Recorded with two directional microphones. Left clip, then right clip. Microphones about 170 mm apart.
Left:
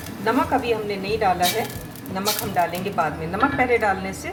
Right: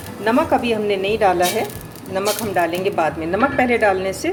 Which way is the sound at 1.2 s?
45° right (ahead or behind).